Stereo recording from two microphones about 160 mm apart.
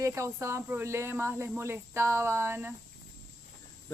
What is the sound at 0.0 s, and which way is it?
Speech, 20° right (ahead or behind).